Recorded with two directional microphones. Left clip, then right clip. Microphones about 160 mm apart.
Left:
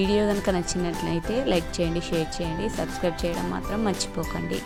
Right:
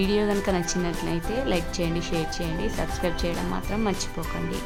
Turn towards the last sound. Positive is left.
turn(degrees=30)  # may be behind; listen again after turning